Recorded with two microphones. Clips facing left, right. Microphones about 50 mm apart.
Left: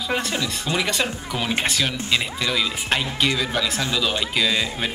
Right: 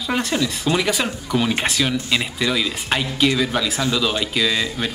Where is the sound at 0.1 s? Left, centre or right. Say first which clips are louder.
Right 4 dB; centre.